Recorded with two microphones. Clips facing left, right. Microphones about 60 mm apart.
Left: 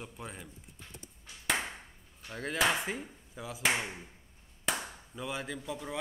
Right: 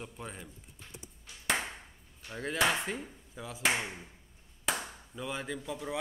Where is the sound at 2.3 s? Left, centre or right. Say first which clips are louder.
Even; centre.